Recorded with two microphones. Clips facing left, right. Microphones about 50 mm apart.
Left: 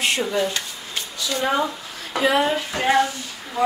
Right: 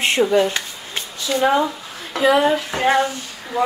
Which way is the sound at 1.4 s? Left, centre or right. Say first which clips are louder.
Right 5 dB; centre.